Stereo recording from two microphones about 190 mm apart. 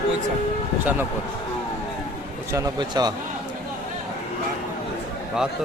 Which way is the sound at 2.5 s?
20° right (ahead or behind).